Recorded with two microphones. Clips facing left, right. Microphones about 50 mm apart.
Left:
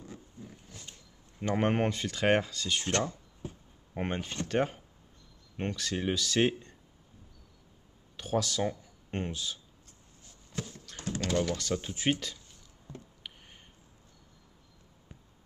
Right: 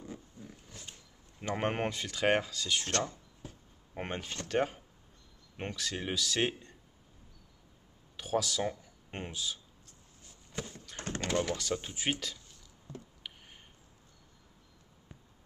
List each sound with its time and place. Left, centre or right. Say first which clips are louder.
0.4 s pig: left 1 dB; centre
1.4 s speech: left 4 dB; centre
3.9 s speech: left 4 dB; centre
8.2 s speech: left 2 dB; centre
10.5 s horse: left 1 dB; centre
11.1 s speech: left 2 dB; centre
11.5 s speech: left 2 dB; centre
13.2 s a sound: left 1 dB; centre